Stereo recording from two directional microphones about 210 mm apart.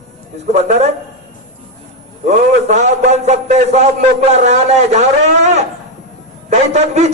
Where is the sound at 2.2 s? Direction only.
35° right (ahead or behind).